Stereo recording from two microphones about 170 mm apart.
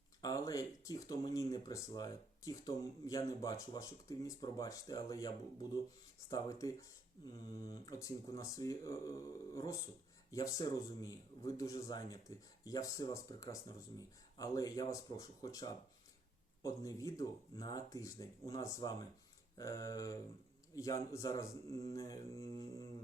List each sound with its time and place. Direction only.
0.2 s speech: 20° left (ahead or behind)
6.3 s speech: 20° left (ahead or behind)